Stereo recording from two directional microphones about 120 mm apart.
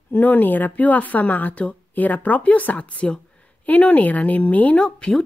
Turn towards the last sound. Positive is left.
turn(degrees=5)  # may be behind; listen again after turning